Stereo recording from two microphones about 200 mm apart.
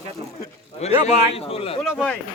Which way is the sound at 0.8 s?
30° left (ahead or behind).